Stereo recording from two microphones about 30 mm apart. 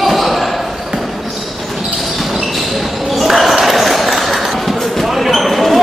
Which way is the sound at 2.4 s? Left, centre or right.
Centre.